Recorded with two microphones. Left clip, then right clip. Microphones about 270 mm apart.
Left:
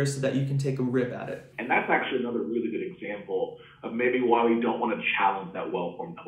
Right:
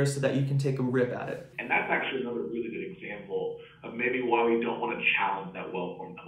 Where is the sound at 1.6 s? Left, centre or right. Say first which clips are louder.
Left 3 dB; centre.